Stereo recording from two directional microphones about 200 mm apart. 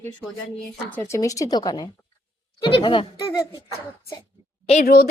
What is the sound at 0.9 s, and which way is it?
Speech, 10° left (ahead or behind).